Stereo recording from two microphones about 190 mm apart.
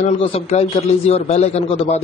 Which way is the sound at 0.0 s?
35° left (ahead or behind).